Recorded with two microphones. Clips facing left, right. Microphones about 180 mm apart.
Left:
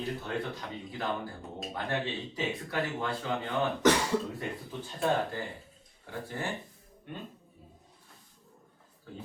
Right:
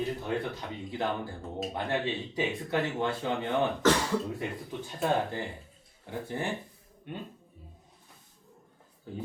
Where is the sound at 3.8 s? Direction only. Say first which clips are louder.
Left 1 dB; 15° left (ahead or behind).